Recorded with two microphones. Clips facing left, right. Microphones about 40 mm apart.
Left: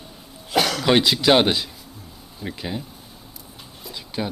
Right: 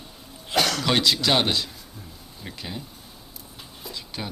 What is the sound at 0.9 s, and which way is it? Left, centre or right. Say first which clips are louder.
Speech: left 6 dB; centre.